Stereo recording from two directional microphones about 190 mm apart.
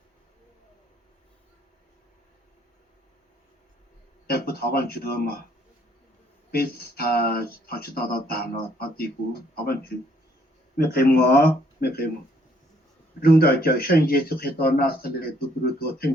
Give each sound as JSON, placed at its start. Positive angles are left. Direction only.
{"t": 4.3, "sound": "speech", "side_deg": 55}
{"t": 6.5, "sound": "speech", "side_deg": 55}
{"t": 13.2, "sound": "speech", "side_deg": 55}